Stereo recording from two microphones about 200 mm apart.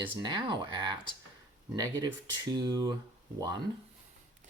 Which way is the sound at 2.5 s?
20° right (ahead or behind).